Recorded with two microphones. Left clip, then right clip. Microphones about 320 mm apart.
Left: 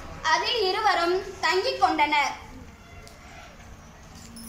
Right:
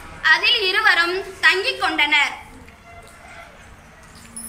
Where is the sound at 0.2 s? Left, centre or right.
Centre.